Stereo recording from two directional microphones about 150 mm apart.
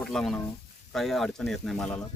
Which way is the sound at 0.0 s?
Centre (ahead or behind).